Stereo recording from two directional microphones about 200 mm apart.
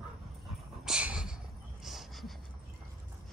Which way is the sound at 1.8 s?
Centre (ahead or behind).